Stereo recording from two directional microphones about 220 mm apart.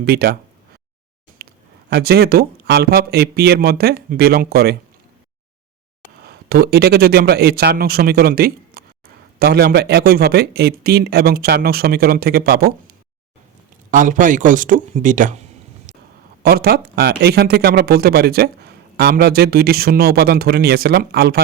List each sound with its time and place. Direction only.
0.0 s speech: 45° right (ahead or behind)
1.4 s a sound: 45° right (ahead or behind)
1.9 s speech: 45° right (ahead or behind)
6.2 s speech: 45° right (ahead or behind)
13.9 s speech: 35° right (ahead or behind)
15.9 s a sound: 35° right (ahead or behind)
16.4 s speech: 45° right (ahead or behind)